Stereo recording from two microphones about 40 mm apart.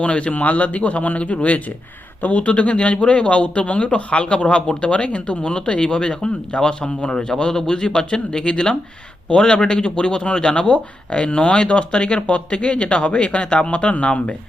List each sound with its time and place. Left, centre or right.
0.0 s speech: left